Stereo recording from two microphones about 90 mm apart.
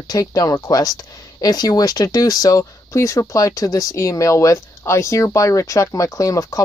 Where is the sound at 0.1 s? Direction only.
40° left (ahead or behind).